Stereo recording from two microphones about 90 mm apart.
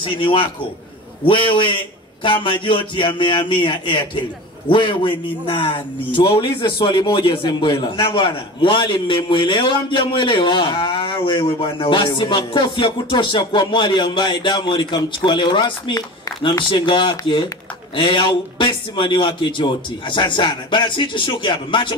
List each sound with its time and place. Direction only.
0.0 s a man's voice: 70° left (ahead or behind)
7.4 s speech: 50° left (ahead or behind)
11.1 s speech: 50° left (ahead or behind)
11.4 s a man's voice: 70° left (ahead or behind); by 16.3 s 45° left (ahead or behind)
16.7 s speech: 60° left (ahead or behind)